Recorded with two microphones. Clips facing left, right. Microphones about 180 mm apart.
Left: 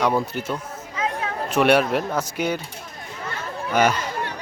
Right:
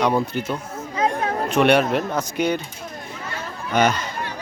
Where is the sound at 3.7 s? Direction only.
10° left (ahead or behind).